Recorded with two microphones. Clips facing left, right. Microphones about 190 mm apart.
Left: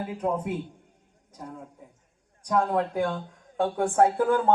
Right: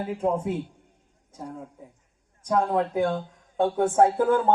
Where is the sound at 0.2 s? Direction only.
25° right (ahead or behind).